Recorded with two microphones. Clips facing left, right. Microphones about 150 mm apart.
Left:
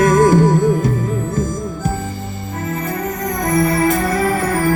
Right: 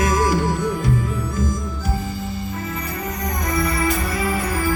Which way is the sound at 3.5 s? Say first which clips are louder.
Left 7 dB; 45° left (ahead or behind).